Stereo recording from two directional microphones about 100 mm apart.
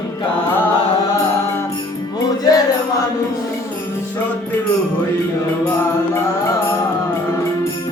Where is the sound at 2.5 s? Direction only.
40° left (ahead or behind).